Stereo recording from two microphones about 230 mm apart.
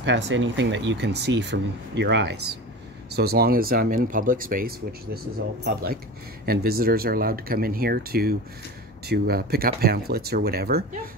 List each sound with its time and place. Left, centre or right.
0.0 s speech: right